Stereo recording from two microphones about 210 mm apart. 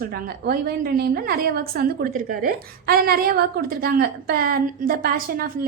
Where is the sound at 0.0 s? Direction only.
45° right (ahead or behind).